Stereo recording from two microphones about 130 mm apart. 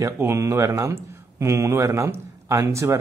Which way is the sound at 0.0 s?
20° right (ahead or behind).